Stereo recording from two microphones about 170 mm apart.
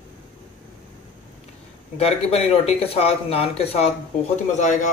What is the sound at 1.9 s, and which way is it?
Speech, 35° left (ahead or behind).